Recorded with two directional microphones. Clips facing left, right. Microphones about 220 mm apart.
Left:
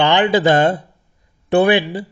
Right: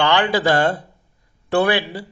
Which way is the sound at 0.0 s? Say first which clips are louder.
Left 4 dB; 20° left (ahead or behind).